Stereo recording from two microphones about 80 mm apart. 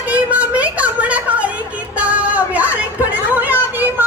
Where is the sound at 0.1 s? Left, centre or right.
Centre.